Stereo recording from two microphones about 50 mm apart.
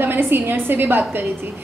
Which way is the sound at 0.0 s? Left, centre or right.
Right.